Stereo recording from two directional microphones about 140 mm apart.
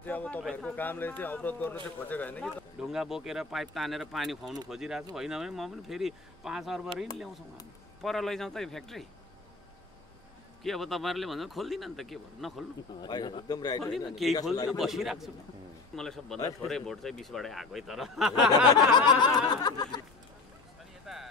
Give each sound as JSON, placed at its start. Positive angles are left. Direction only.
{"t": 0.0, "sound": "a sound", "side_deg": 10}
{"t": 0.4, "sound": "speech", "side_deg": -5}
{"t": 0.7, "sound": "speech", "side_deg": 15}
{"t": 2.8, "sound": "speech", "side_deg": -5}
{"t": 10.6, "sound": "speech", "side_deg": 0}
{"t": 13.0, "sound": "a man's voice", "side_deg": 30}
{"t": 13.8, "sound": "speech", "side_deg": 0}
{"t": 18.8, "sound": "snicker", "side_deg": 30}
{"t": 21.1, "sound": "a sound", "side_deg": -5}